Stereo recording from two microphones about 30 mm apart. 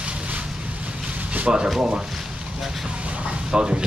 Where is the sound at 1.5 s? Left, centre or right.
Right.